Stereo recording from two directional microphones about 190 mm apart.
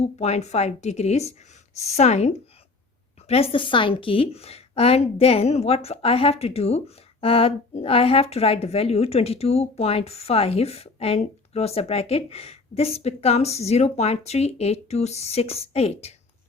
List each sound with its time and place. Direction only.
0.0 s a woman's voice: 35° left (ahead or behind)